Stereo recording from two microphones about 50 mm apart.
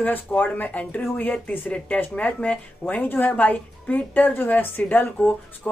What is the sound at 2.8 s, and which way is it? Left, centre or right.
A woman's voice, left.